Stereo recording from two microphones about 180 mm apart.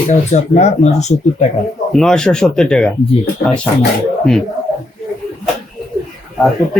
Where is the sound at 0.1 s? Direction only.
40° left (ahead or behind).